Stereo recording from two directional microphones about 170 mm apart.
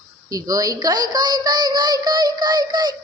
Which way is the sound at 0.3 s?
20° right (ahead or behind).